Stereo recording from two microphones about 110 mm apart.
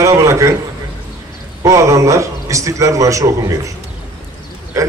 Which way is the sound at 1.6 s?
30° right (ahead or behind).